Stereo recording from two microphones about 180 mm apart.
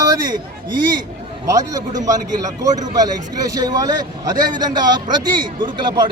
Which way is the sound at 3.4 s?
20° right (ahead or behind).